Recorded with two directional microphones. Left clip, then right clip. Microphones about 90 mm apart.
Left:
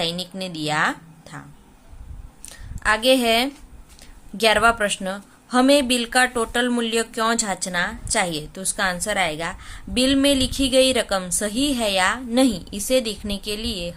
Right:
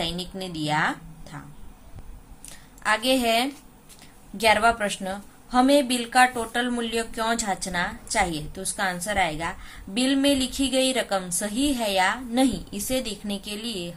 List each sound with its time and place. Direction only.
0.0 s a woman's voice: 55° left (ahead or behind)
2.5 s a woman's voice: 45° left (ahead or behind)
4.4 s a woman's voice: 50° left (ahead or behind)